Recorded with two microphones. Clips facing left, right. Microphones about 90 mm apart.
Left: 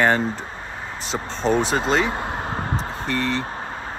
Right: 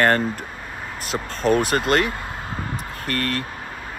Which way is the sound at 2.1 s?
25° left (ahead or behind).